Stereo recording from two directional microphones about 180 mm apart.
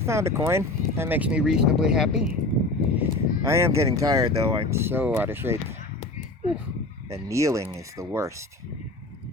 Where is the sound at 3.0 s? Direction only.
15° right (ahead or behind).